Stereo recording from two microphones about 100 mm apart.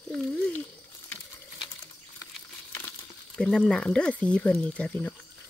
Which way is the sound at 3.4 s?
5° left (ahead or behind).